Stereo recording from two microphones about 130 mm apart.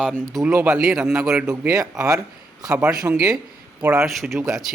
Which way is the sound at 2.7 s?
5° right (ahead or behind).